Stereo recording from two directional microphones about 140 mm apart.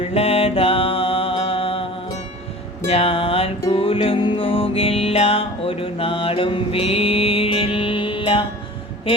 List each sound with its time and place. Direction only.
0.0 s music: 45° left (ahead or behind)